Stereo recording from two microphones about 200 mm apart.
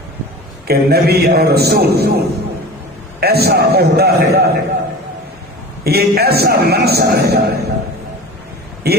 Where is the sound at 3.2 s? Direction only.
50° right (ahead or behind).